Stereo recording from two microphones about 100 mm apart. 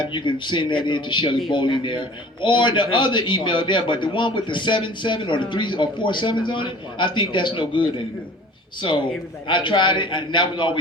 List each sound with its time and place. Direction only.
0.0 s a man's voice: 55° left (ahead or behind)
9.5 s a man's voice: 55° left (ahead or behind)